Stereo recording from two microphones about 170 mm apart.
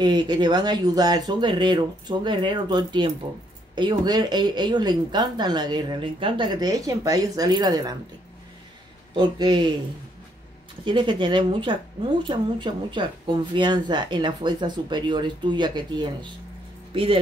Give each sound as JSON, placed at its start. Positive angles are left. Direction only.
{"t": 0.0, "sound": "speech", "side_deg": -25}
{"t": 9.1, "sound": "speech", "side_deg": -25}
{"t": 10.9, "sound": "speech", "side_deg": -25}